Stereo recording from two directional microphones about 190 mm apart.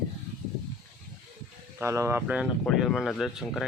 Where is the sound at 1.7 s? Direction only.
15° right (ahead or behind).